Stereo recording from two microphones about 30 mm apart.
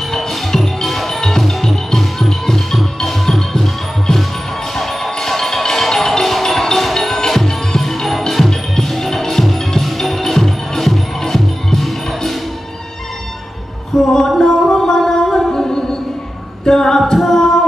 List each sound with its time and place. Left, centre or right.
0.1 s music: centre
13.9 s a sound: centre
14.4 s music: centre
15.5 s music: centre
16.6 s a capella: centre
17.1 s music: centre